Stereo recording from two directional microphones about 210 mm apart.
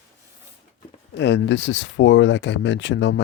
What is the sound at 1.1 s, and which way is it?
Speech, 55° left (ahead or behind).